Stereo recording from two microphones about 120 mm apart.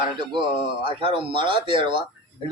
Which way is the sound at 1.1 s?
45° right (ahead or behind).